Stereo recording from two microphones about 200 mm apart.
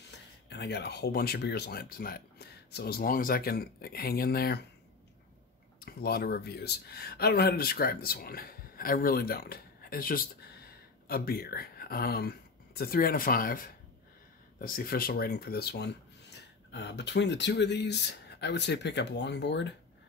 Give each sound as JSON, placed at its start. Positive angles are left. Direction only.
{"t": 0.1, "sound": "speech", "side_deg": 60}
{"t": 5.8, "sound": "speech", "side_deg": 50}